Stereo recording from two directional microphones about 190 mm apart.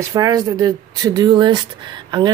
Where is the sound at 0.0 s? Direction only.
20° right (ahead or behind).